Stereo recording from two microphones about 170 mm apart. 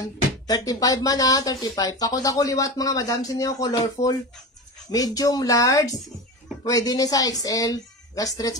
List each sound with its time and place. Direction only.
0.7 s speech: 20° left (ahead or behind)
4.9 s speech: 20° left (ahead or behind)